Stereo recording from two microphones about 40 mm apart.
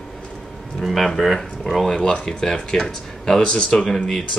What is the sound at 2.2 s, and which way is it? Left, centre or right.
Speech, centre.